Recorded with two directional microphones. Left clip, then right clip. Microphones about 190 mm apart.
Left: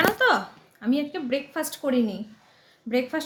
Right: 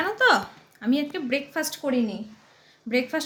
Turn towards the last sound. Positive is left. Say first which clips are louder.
# right 1 dB
turn(degrees=-5)  # may be behind; listen again after turning